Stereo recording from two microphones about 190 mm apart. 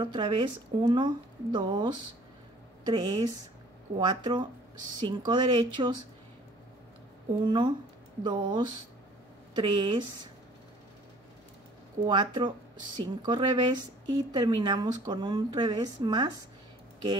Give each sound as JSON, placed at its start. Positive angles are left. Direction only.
{"t": 0.0, "sound": "speech", "side_deg": -25}
{"t": 7.4, "sound": "speech", "side_deg": -25}
{"t": 12.0, "sound": "speech", "side_deg": -25}